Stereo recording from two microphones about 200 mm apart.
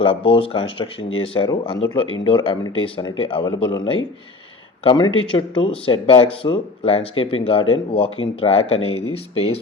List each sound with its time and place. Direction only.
0.0 s speech: 25° left (ahead or behind)